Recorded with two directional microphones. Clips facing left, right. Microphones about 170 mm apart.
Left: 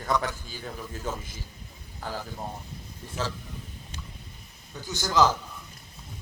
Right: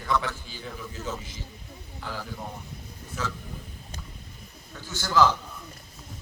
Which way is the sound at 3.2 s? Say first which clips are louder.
Left 2 dB; 30° left (ahead or behind).